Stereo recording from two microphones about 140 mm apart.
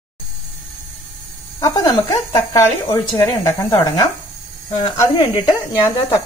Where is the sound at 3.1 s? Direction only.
25° left (ahead or behind).